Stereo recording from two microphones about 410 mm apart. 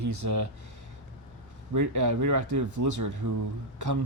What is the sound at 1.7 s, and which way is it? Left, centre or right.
Speech, right.